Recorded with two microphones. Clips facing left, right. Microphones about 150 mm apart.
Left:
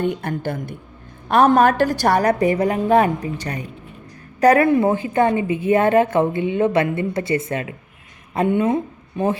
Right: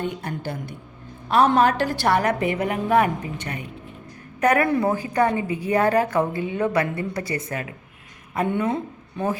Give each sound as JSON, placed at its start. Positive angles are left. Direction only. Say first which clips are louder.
{"t": 0.0, "sound": "a woman's voice", "louder": "left 6 dB", "side_deg": 55}